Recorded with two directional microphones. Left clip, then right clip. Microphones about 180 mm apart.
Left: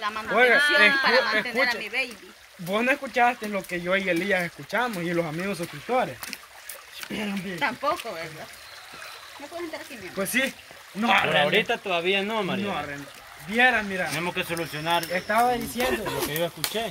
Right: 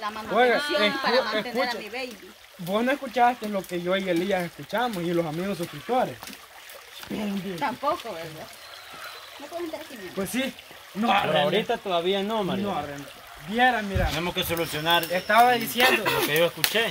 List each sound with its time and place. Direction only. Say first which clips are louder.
0.0 s speech: left 1 dB; 15° left (ahead or behind)
0.9 s speech: left 3 dB; 5° left (ahead or behind)
7.2 s speech: left 1 dB; 10° left (ahead or behind)
10.2 s speech: left 5 dB; 15° left (ahead or behind)
11.0 s speech: left 1 dB; 25° left (ahead or behind)
11.5 s speech: left 1 dB; 5° right (ahead or behind)
13.6 s speech: left 1 dB; 25° left (ahead or behind)
14.1 s speech: right 1 dB; 10° right (ahead or behind)
15.1 s speech: right 5 dB; 15° left (ahead or behind)
15.8 s speech: right 9 dB; 5° right (ahead or behind)